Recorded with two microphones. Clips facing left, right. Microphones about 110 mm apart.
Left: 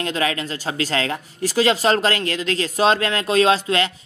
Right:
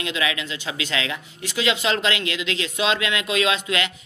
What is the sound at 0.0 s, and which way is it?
Speech, 40° left (ahead or behind).